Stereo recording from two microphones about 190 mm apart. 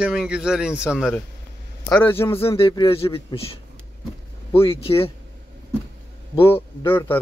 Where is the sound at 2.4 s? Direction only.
30° left (ahead or behind).